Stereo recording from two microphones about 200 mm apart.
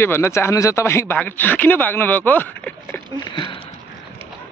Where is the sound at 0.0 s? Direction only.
10° left (ahead or behind).